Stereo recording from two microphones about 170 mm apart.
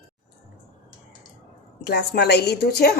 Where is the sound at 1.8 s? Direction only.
80° left.